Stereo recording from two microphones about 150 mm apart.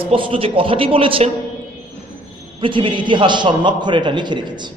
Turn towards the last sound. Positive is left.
turn(degrees=-30)  # may be behind; listen again after turning